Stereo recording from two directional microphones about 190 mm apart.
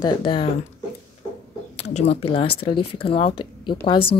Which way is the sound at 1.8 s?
35° left (ahead or behind).